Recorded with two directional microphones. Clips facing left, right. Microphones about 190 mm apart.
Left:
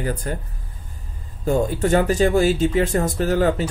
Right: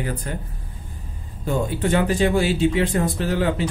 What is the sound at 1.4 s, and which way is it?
Speech, 45° left (ahead or behind).